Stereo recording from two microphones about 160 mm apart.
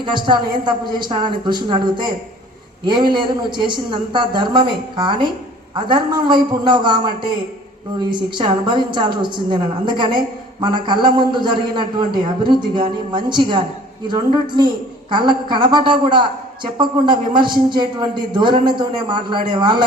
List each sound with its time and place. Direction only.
0.0 s a woman's voice: 30° right (ahead or behind)